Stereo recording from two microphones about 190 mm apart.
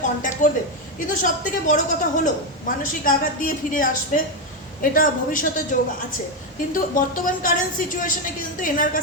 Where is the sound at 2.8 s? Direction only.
45° left (ahead or behind).